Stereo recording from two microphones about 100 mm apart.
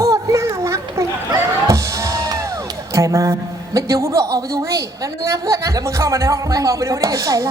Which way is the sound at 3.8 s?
30° right (ahead or behind).